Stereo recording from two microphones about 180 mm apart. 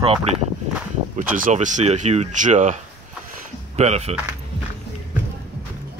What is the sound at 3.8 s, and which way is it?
Speech, 35° right (ahead or behind).